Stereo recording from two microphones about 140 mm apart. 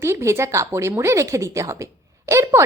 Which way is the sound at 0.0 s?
20° right (ahead or behind).